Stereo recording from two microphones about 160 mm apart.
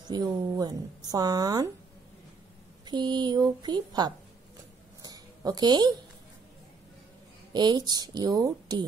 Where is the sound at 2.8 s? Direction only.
25° right (ahead or behind).